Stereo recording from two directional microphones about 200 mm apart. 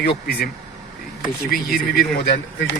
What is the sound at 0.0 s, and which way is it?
Speech, 50° left (ahead or behind).